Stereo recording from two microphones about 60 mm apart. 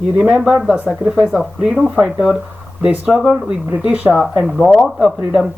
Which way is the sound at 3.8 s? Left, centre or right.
Right.